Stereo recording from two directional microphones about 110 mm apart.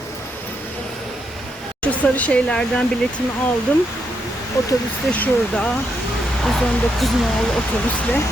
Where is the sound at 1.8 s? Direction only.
10° left (ahead or behind).